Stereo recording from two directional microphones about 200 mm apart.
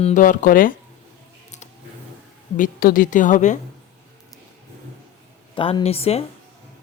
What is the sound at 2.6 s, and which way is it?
Speech, 45° left (ahead or behind).